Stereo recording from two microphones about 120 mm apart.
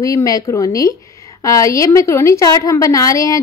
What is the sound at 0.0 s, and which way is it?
A woman's voice, 30° left (ahead or behind).